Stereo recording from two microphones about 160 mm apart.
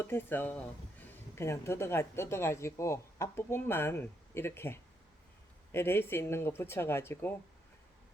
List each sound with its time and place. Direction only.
0.0 s speech: 15° left (ahead or behind)